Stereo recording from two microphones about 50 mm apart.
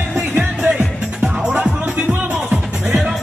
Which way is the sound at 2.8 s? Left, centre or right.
Centre.